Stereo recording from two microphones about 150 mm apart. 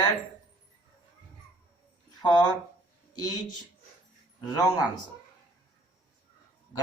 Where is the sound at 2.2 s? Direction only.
30° left (ahead or behind).